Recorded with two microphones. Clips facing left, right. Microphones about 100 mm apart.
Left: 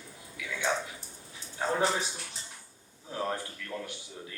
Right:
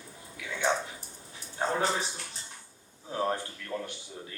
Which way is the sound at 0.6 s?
30° right (ahead or behind).